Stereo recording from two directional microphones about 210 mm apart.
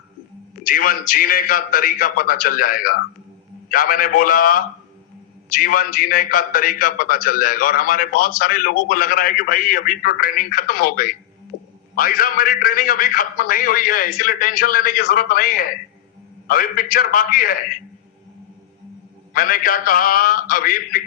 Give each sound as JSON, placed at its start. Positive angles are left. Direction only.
{"t": 0.6, "sound": "a man's voice", "side_deg": 40}
{"t": 19.3, "sound": "a man's voice", "side_deg": 40}